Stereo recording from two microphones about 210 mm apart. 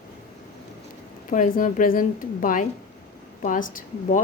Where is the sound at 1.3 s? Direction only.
40° left (ahead or behind).